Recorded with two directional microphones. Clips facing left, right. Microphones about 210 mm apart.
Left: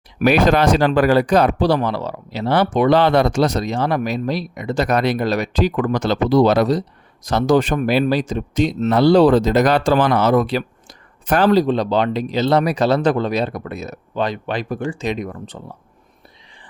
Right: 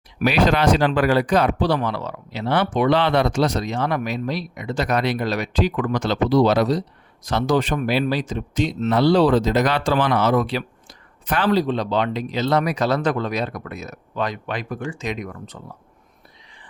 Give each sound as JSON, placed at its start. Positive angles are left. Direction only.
{"t": 0.2, "sound": "speech", "side_deg": 50}